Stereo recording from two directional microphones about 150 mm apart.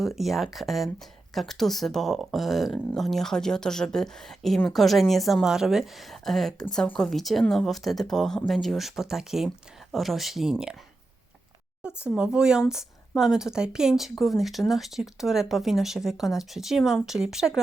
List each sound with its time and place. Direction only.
0.0 s speech: centre (ahead or behind)
11.8 s speech: 5° right (ahead or behind)